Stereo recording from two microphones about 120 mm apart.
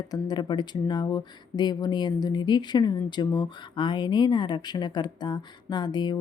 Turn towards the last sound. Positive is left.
turn(degrees=35)  # may be behind; listen again after turning